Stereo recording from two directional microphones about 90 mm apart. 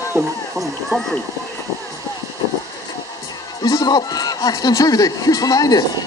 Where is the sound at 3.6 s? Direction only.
45° left (ahead or behind).